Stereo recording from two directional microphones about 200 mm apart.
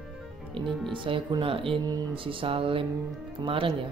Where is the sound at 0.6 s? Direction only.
25° right (ahead or behind).